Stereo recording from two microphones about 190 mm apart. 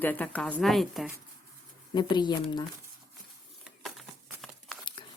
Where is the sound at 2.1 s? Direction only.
20° left (ahead or behind).